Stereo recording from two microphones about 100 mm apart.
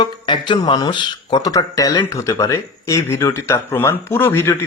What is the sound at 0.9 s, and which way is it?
Speech, 50° left (ahead or behind).